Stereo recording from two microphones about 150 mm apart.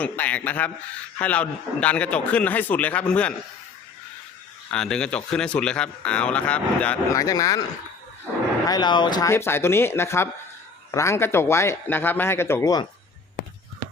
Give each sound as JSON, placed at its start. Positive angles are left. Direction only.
{"t": 0.0, "sound": "speech", "side_deg": 10}
{"t": 4.7, "sound": "speech", "side_deg": 5}
{"t": 7.1, "sound": "speech", "side_deg": 25}
{"t": 8.6, "sound": "speech", "side_deg": 30}